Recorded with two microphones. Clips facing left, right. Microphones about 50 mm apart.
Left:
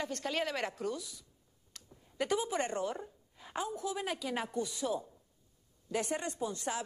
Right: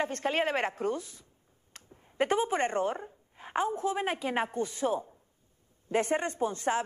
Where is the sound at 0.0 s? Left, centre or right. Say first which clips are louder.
Right 6 dB; right.